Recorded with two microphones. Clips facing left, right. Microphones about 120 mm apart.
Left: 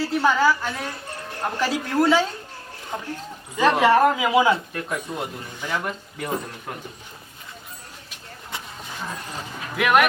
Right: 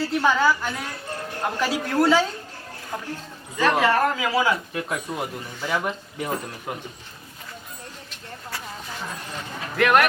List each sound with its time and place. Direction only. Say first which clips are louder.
0.0 s speech: left 1 dB; centre (ahead or behind)
3.6 s speech: left 3 dB; 15° left (ahead or behind)
4.7 s speech: right 1 dB; 5° right (ahead or behind)
9.7 s speech: even; 5° left (ahead or behind)